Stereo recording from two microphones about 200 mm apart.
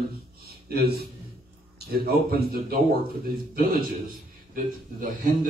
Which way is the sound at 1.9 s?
50° right (ahead or behind).